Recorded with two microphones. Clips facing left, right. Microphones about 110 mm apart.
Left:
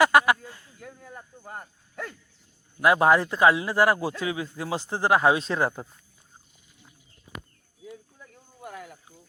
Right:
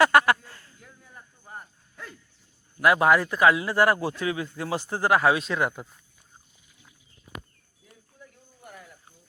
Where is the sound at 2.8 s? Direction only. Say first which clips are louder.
Even; 25° left (ahead or behind).